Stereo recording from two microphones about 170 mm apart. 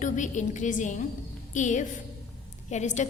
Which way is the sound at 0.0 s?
45° left (ahead or behind).